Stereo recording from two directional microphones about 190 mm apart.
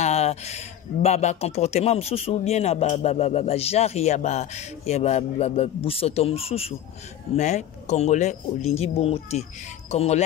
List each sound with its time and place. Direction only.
0.0 s a man's voice: 35° left (ahead or behind)